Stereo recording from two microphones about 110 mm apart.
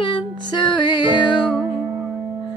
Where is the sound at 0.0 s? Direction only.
45° left (ahead or behind).